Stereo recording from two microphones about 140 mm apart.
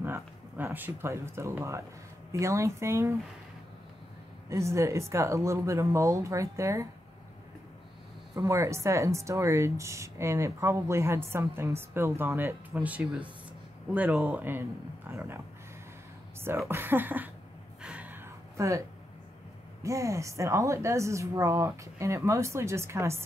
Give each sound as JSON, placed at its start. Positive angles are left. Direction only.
{"t": 0.0, "sound": "speech", "side_deg": -15}
{"t": 4.5, "sound": "speech", "side_deg": -20}
{"t": 8.4, "sound": "speech", "side_deg": -20}
{"t": 17.8, "sound": "a sound", "side_deg": -10}
{"t": 19.8, "sound": "speech", "side_deg": -20}